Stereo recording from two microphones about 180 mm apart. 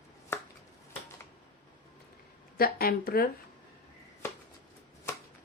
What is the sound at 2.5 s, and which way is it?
Speech, 55° left (ahead or behind).